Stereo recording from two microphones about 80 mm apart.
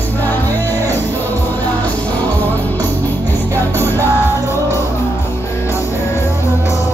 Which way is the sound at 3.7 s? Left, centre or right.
Left.